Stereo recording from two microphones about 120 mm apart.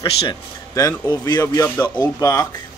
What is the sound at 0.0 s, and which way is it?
Speech, 50° left (ahead or behind).